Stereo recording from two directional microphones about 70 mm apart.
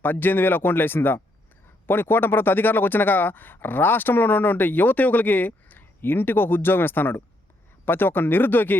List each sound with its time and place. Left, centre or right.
0.0 s speech: left